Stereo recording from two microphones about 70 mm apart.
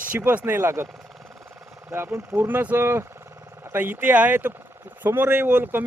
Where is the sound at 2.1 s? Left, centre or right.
Right.